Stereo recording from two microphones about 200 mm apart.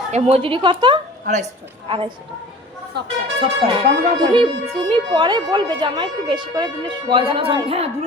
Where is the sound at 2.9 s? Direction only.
55° right (ahead or behind).